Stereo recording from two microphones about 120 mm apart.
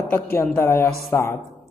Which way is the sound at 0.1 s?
20° left (ahead or behind).